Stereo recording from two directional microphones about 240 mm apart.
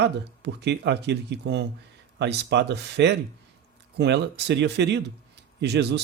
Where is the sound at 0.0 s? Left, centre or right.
Right.